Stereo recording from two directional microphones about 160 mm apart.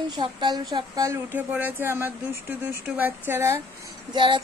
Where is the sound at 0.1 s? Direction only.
30° right (ahead or behind).